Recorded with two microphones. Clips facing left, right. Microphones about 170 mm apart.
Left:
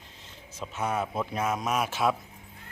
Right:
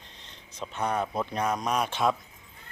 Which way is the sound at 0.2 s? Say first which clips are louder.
Right 1 dB; 5° left (ahead or behind).